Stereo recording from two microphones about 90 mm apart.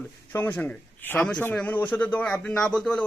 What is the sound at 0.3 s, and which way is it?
A man's voice, 20° left (ahead or behind).